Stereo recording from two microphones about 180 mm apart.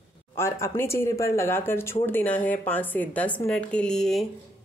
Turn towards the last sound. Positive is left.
turn(degrees=5)  # may be behind; listen again after turning